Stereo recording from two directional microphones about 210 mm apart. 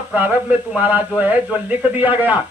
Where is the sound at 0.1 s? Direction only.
5° right (ahead or behind).